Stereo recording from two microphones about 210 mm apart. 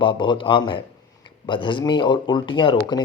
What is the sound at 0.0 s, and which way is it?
Speech, 25° left (ahead or behind).